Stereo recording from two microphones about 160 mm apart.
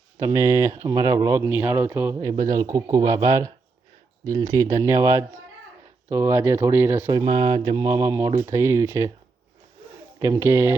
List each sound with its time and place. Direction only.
0.2 s speech: 20° right (ahead or behind)
10.2 s speech: 15° right (ahead or behind)